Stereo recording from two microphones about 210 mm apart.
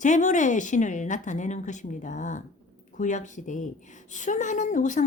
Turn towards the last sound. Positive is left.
turn(degrees=35)  # may be behind; listen again after turning